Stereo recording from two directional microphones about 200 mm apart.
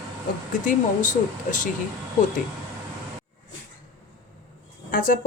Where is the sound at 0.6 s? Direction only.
40° left (ahead or behind).